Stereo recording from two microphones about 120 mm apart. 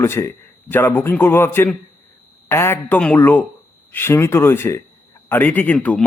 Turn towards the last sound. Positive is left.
turn(degrees=10)  # may be behind; listen again after turning